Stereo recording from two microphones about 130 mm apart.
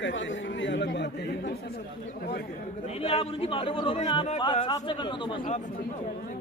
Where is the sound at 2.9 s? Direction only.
50° left (ahead or behind).